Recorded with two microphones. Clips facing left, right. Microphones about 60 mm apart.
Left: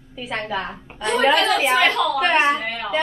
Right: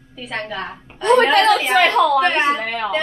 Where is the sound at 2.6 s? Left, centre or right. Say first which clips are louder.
Right 4 dB; right.